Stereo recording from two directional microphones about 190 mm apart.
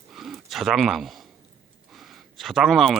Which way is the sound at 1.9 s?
Centre (ahead or behind).